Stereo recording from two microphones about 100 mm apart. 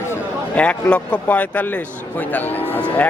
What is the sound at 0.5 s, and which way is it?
A man's voice, 10° left (ahead or behind).